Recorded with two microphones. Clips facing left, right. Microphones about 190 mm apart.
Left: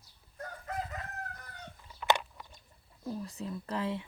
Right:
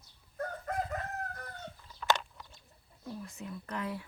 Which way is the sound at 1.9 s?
10° left (ahead or behind).